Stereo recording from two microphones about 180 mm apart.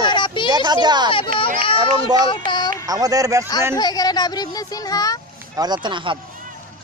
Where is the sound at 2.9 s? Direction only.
20° right (ahead or behind).